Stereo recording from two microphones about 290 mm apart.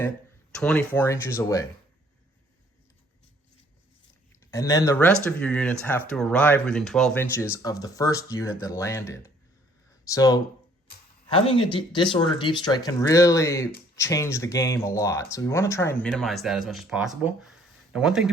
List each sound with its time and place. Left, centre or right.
0.5 s speech: centre
4.5 s speech: centre